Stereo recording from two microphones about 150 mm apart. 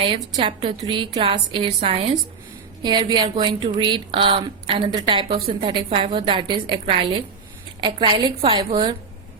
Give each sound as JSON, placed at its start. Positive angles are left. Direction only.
{"t": 0.0, "sound": "a woman's voice", "side_deg": -35}
{"t": 2.8, "sound": "a woman's voice", "side_deg": -30}